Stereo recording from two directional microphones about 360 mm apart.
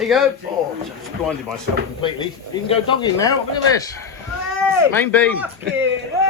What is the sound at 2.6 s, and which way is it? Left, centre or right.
Speech, centre.